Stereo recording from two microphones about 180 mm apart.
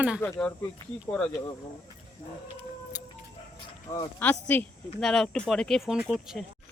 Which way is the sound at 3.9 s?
15° left (ahead or behind).